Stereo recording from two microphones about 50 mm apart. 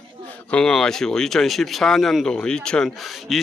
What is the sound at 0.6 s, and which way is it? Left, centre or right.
Speech, centre.